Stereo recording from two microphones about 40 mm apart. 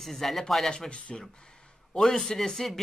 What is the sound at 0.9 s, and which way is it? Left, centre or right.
Speech, left.